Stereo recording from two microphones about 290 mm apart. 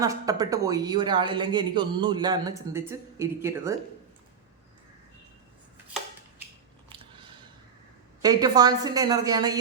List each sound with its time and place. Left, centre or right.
0.0 s speech: centre
6.9 s a sound: centre
8.2 s speech: centre